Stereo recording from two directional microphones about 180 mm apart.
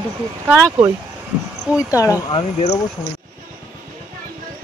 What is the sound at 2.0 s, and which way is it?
Speech, 20° left (ahead or behind).